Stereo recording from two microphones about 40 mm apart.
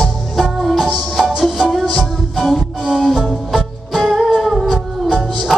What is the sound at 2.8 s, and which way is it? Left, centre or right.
Music, centre.